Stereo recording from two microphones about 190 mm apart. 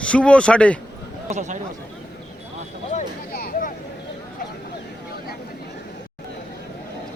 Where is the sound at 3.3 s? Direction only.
50° left (ahead or behind).